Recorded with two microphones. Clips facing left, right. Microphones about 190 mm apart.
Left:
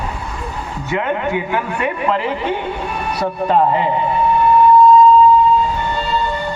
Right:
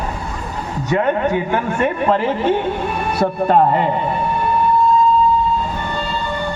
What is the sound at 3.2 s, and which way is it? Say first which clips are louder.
Speech: right 1 dB; 50° right (ahead or behind).